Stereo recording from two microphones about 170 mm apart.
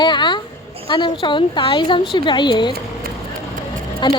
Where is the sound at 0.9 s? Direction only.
30° left (ahead or behind).